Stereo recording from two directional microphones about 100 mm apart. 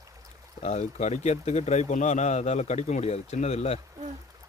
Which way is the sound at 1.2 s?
90° left.